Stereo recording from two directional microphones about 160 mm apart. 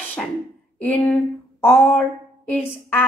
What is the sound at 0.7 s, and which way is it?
A woman's voice, 10° left (ahead or behind).